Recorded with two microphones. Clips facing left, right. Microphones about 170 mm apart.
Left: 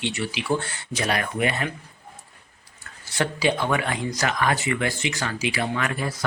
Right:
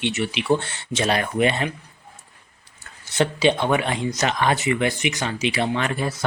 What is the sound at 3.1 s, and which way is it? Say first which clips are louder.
Speech: right 4 dB; 20° right (ahead or behind).